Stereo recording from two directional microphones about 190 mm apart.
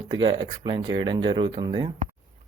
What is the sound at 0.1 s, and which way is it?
Speech, 25° right (ahead or behind).